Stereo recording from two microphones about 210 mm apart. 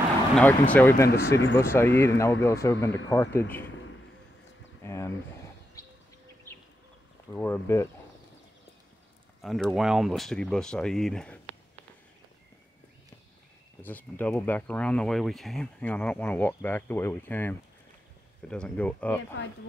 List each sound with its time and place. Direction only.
0.4 s speech: 5° left (ahead or behind)
4.8 s speech: 10° left (ahead or behind)
5.8 s bird: 15° left (ahead or behind)
7.3 s speech: 10° left (ahead or behind)
9.4 s speech: centre (ahead or behind)
13.8 s speech: 10° left (ahead or behind)